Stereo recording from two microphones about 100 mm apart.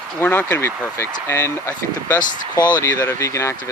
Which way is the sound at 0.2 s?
20° left (ahead or behind).